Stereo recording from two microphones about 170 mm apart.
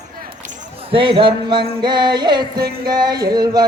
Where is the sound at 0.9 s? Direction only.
30° right (ahead or behind).